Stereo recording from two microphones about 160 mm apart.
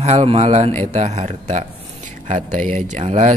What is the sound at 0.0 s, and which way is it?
Speech, 40° right (ahead or behind).